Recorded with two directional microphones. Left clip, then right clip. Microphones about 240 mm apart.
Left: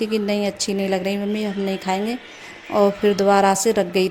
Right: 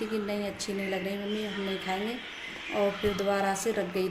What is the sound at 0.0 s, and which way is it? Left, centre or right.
Speech, left.